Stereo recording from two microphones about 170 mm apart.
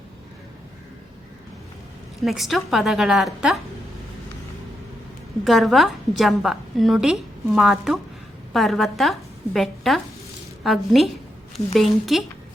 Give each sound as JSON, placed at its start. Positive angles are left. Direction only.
{"t": 2.2, "sound": "a woman's voice", "side_deg": 0}
{"t": 5.5, "sound": "a woman's voice", "side_deg": 0}